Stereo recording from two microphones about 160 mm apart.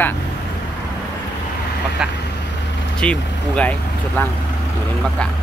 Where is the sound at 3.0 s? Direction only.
5° left (ahead or behind).